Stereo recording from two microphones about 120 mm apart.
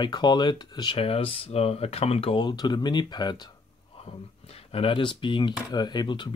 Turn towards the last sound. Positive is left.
turn(degrees=40)  # may be behind; listen again after turning